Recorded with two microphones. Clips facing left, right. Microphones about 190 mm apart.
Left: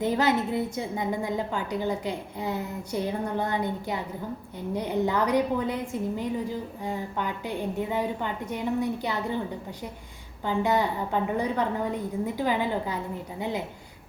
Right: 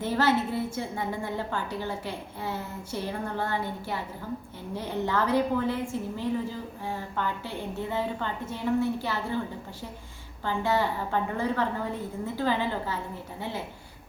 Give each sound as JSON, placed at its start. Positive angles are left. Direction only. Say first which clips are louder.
{"t": 0.0, "sound": "a woman's voice", "louder": "left 1 dB", "side_deg": 15}
{"t": 10.4, "sound": "a woman's voice", "louder": "left 2 dB", "side_deg": 15}